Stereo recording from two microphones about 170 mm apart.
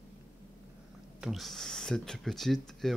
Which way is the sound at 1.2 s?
Centre (ahead or behind).